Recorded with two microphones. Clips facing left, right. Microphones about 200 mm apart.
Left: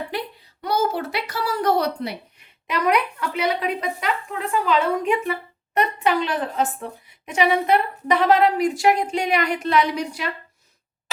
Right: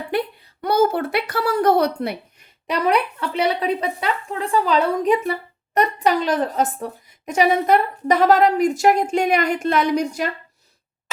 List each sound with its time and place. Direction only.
0.1 s a woman's voice: 55° right (ahead or behind)
2.6 s a woman's voice: 30° right (ahead or behind)